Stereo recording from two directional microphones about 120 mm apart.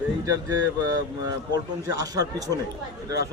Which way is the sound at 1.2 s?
30° right (ahead or behind).